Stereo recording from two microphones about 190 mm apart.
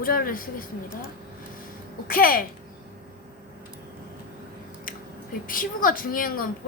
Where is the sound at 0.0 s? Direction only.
50° left (ahead or behind).